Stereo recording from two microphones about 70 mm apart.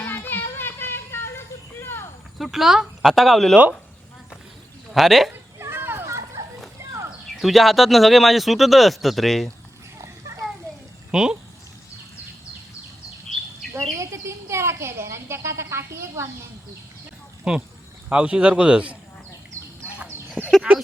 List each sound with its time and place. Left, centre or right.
0.0 s a sound: left
2.4 s speech: centre
4.9 s speech: centre
5.3 s children playing: right
7.3 s speech: centre
10.0 s a sound: right
11.1 s speech: centre
13.7 s speech: right
17.5 s speech: centre
20.4 s speech: centre